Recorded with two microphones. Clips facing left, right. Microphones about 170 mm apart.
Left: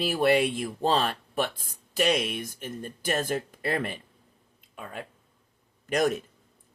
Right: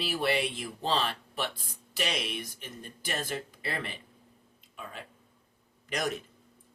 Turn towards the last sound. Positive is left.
turn(degrees=50)  # may be behind; listen again after turning